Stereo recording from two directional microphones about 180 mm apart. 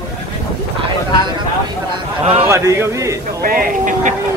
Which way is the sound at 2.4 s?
15° right (ahead or behind).